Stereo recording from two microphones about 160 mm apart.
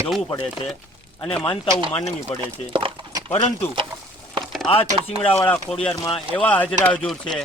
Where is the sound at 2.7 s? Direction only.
30° right (ahead or behind).